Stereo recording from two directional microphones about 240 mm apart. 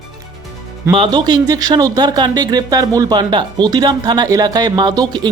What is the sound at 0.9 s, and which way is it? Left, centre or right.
Speech, centre.